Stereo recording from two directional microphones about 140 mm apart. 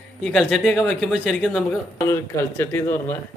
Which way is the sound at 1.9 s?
20° left (ahead or behind).